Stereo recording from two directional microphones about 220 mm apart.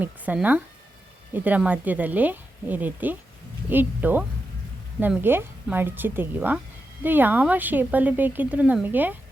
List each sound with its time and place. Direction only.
0.0 s speech: 5° right (ahead or behind)